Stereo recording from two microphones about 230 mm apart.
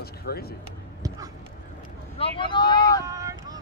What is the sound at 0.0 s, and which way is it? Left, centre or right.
Speech, left.